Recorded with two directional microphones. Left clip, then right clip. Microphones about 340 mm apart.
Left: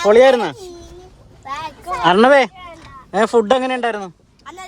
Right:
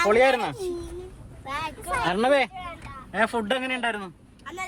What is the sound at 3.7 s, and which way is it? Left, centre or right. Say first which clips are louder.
Speech: left 7 dB; left.